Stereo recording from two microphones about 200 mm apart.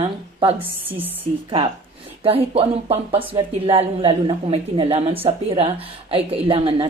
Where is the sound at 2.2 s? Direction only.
30° right (ahead or behind).